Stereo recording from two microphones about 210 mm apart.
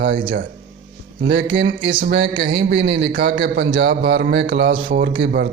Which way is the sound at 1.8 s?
25° right (ahead or behind).